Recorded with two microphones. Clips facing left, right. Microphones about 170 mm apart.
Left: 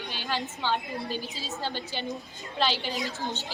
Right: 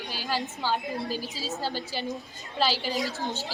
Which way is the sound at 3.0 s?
40° right (ahead or behind).